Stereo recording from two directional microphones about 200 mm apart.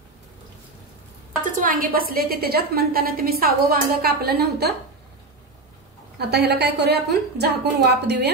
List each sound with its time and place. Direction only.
1.4 s a woman's voice: 45° right (ahead or behind)
6.1 s a woman's voice: 55° right (ahead or behind)